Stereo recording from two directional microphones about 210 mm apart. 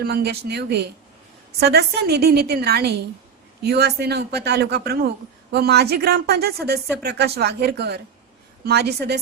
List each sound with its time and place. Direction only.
0.0 s a woman's voice: 50° right (ahead or behind)